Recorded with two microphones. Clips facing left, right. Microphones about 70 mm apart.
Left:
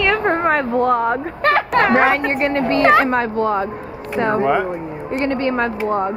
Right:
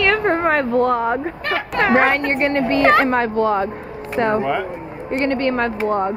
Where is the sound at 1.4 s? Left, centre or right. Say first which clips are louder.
Left 10 dB; left.